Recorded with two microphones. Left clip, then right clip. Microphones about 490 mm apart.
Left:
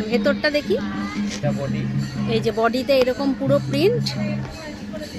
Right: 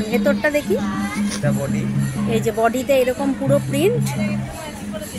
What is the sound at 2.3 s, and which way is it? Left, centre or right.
A woman's voice, left.